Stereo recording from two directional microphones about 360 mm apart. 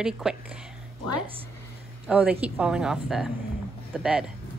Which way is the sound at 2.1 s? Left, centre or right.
Centre.